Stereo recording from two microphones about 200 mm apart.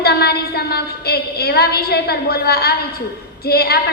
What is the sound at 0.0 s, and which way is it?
A woman's voice, 55° left (ahead or behind).